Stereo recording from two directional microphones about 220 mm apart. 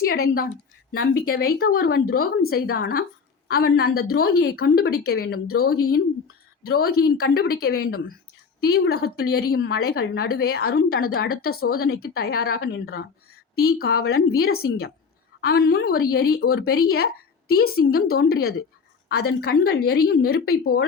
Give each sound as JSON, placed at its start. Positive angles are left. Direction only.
{"t": 0.3, "sound": "a woman's voice", "side_deg": 45}